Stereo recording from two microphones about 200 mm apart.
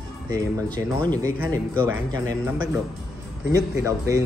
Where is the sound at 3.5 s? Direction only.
15° right (ahead or behind).